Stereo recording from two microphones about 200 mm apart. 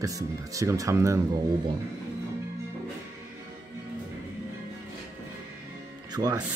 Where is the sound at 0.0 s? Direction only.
15° right (ahead or behind).